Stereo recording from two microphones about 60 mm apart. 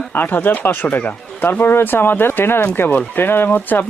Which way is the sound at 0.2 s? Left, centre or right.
Left.